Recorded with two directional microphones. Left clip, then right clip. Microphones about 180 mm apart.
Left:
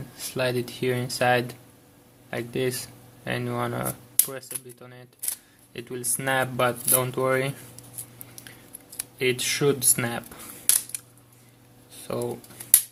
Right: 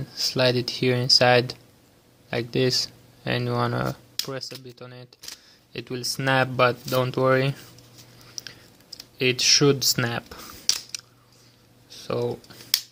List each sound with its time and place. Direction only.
0.2 s speech: 45° right (ahead or behind)
9.1 s speech: 45° right (ahead or behind)
11.9 s a sound: 45° right (ahead or behind)